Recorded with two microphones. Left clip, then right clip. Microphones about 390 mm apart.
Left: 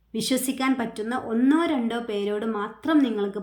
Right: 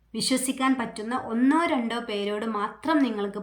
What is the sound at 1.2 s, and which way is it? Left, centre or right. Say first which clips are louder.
Speech: left 1 dB; centre.